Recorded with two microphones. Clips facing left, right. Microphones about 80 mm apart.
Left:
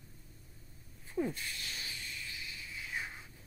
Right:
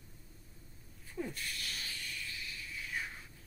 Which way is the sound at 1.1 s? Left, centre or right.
Left.